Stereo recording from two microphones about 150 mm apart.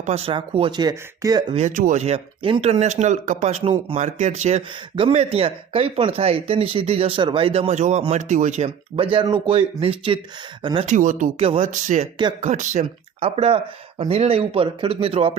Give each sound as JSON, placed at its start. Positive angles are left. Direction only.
{"t": 0.0, "sound": "speech", "side_deg": -45}
{"t": 1.5, "sound": "speech", "side_deg": -55}
{"t": 3.9, "sound": "speech", "side_deg": -50}
{"t": 10.8, "sound": "speech", "side_deg": -60}
{"t": 11.3, "sound": "speech", "side_deg": -40}
{"t": 11.7, "sound": "speech", "side_deg": -55}